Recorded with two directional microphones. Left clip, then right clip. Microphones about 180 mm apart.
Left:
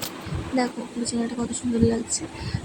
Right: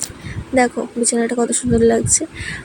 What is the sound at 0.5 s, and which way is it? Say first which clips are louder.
Speech: right 10 dB; 30° right (ahead or behind).